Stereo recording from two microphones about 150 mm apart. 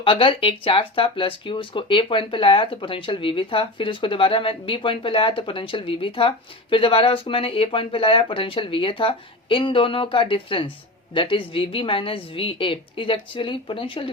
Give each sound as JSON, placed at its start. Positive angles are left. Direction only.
{"t": 0.0, "sound": "speech", "side_deg": 35}